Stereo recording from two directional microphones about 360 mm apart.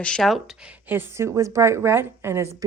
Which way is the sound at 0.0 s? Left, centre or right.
Centre.